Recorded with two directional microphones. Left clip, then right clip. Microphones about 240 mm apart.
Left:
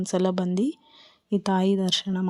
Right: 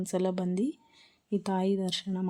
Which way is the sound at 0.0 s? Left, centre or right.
Centre.